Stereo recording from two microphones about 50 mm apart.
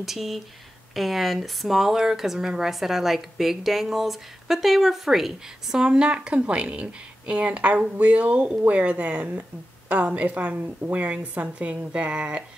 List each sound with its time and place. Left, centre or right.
0.0 s speech: centre
5.8 s speech: centre